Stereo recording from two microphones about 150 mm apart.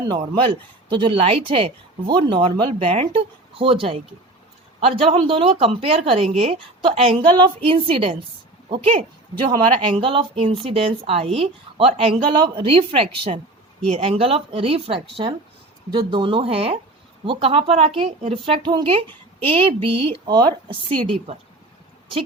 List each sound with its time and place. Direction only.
0.1 s speech: 30° right (ahead or behind)